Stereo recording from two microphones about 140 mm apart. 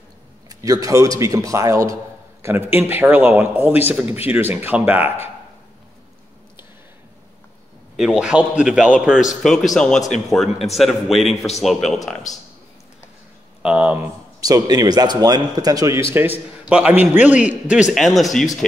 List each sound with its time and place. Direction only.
0.5 s a man's voice: 25° right (ahead or behind)
7.9 s a man's voice: centre (ahead or behind)
9.9 s speech: 60° left (ahead or behind)
10.3 s a man's voice: centre (ahead or behind)
13.6 s speech: 5° right (ahead or behind)
14.4 s a man's voice: 25° right (ahead or behind); by 18.8 s 5° left (ahead or behind)